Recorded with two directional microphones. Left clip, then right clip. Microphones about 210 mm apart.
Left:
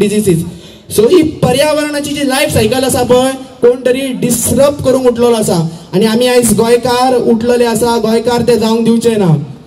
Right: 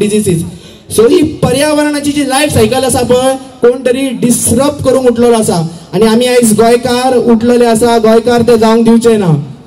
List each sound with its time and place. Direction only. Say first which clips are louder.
0.0 s speech: even; 25° left (ahead or behind)